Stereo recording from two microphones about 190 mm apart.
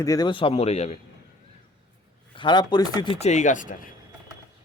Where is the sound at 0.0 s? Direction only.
20° left (ahead or behind); by 0.9 s 35° left (ahead or behind).